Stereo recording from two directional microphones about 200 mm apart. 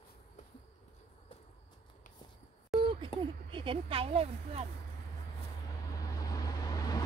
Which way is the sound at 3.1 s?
30° left (ahead or behind).